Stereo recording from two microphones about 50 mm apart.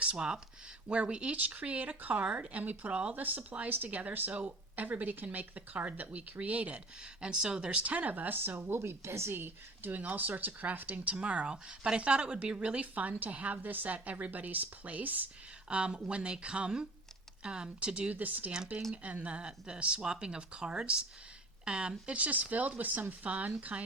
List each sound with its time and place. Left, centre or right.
0.0 s speech: centre; by 8.5 s right
8.5 s speech: right
9.3 s speech: right
15.7 s speech: right
18.1 s speech: right